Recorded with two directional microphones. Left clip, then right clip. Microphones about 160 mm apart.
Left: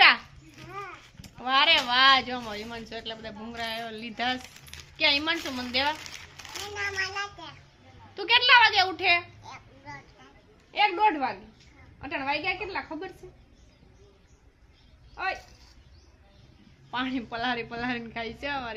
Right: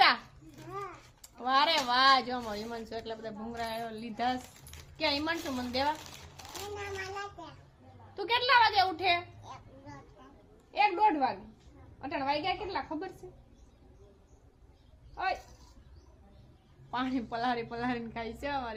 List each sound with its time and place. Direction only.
1.2 s a sound: centre (ahead or behind)
2.6 s a woman's voice: centre (ahead or behind)
6.1 s a child's voice: 10° right (ahead or behind)
8.1 s a woman's voice: centre (ahead or behind)
9.4 s a sound: 25° right (ahead or behind)
10.7 s a woman's voice: centre (ahead or behind)
15.1 s speech: centre (ahead or behind)
16.9 s a woman's voice: centre (ahead or behind)